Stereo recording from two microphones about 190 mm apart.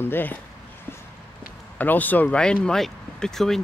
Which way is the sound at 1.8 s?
10° left (ahead or behind).